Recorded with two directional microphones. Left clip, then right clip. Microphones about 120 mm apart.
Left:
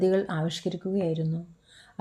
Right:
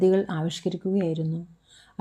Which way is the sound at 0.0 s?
5° right (ahead or behind).